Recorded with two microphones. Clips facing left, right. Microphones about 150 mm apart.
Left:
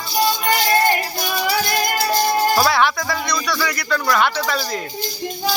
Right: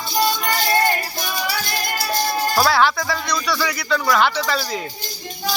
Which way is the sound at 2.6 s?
Centre (ahead or behind).